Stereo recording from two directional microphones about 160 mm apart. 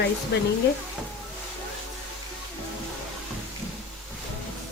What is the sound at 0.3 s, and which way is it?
Speech, 90° left.